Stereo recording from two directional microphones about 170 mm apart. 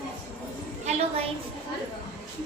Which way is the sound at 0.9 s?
40° right (ahead or behind).